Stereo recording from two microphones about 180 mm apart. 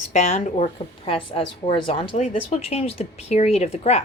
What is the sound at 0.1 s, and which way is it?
A woman's voice, 40° left (ahead or behind).